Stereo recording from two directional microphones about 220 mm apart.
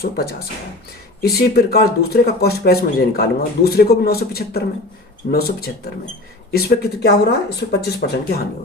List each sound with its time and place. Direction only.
0.0 s speech: 45° left (ahead or behind)